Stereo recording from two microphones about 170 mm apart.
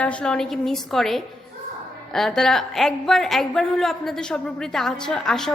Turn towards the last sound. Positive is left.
turn(degrees=5)  # may be behind; listen again after turning